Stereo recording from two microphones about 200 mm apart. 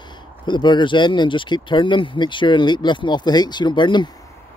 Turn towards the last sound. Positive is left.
turn(degrees=25)  # may be behind; listen again after turning